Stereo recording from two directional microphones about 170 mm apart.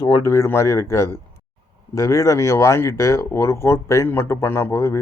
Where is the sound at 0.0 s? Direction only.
20° left (ahead or behind).